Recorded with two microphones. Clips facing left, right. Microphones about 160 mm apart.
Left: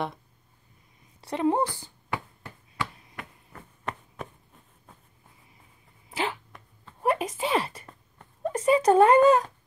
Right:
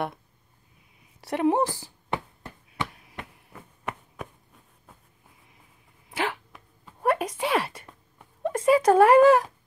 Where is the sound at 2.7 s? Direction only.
20° right (ahead or behind).